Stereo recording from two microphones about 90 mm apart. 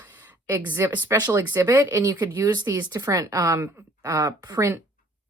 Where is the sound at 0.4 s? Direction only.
20° right (ahead or behind); by 4.7 s 35° right (ahead or behind).